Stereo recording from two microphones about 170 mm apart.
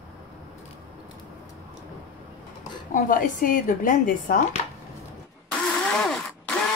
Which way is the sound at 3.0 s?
55° left (ahead or behind).